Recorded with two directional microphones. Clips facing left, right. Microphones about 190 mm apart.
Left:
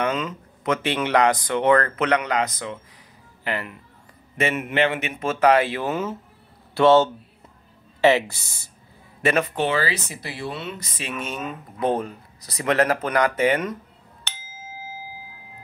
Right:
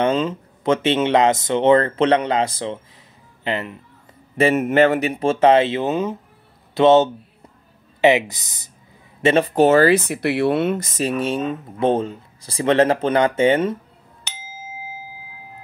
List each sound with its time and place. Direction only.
0.0 s speech: 30° right (ahead or behind)
4.4 s speech: 40° right (ahead or behind)
9.6 s speech: 45° right (ahead or behind); by 13.7 s 25° right (ahead or behind)